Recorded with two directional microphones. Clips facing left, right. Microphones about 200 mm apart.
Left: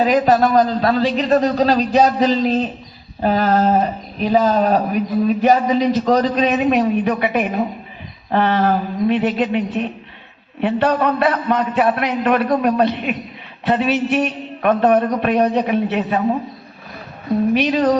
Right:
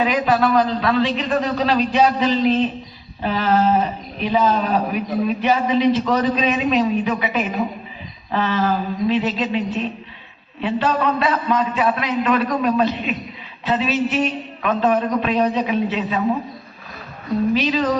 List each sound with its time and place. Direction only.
0.0 s a man's voice: 40° left (ahead or behind)
17.5 s a man's voice: 55° left (ahead or behind)